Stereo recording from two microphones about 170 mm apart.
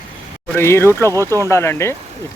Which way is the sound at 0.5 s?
15° left (ahead or behind).